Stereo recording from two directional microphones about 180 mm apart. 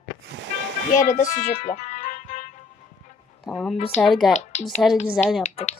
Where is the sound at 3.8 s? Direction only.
35° left (ahead or behind).